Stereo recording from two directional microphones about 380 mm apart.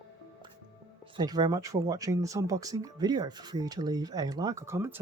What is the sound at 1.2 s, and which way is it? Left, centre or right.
Speech, centre.